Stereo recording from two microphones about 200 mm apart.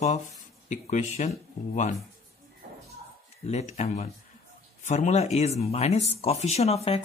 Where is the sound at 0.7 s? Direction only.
35° left (ahead or behind).